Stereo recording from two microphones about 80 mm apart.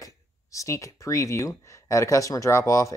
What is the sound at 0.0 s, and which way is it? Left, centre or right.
Speech, left.